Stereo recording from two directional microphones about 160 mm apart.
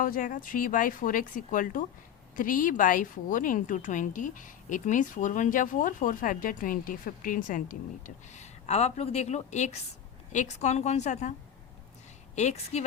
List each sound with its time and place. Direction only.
0.0 s a woman's voice: 60° left (ahead or behind)
12.4 s a woman's voice: 45° left (ahead or behind)